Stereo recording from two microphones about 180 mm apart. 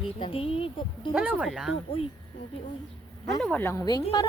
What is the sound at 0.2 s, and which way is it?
Speech, 30° left (ahead or behind).